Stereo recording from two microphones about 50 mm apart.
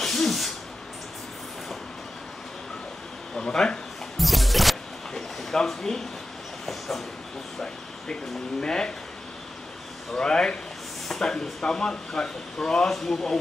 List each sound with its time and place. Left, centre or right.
0.0 s sneeze: centre
3.3 s speech: centre
4.2 s a sound: centre
6.6 s dog: centre
7.6 s speech: centre
10.1 s speech: centre